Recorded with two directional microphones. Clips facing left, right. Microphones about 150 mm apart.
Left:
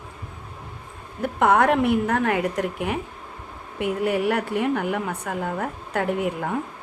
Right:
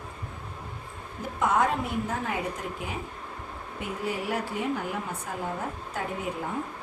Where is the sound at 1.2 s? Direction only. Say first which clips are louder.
Left 6 dB; 65° left (ahead or behind).